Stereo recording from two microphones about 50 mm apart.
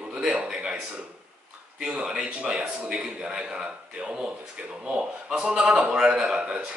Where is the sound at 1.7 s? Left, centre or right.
Centre.